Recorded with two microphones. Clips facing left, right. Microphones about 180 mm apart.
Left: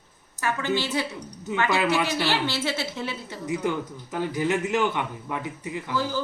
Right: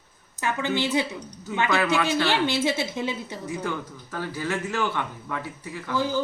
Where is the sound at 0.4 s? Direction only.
15° right (ahead or behind).